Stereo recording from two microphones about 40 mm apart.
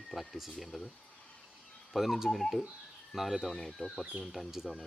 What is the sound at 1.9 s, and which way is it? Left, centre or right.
Speech, centre.